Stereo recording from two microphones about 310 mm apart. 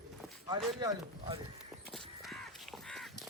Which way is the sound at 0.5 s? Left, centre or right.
Centre.